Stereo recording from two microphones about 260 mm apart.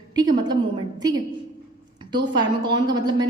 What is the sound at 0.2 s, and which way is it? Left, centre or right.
Speech, centre.